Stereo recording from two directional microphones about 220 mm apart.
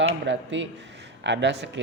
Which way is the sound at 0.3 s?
55° right (ahead or behind).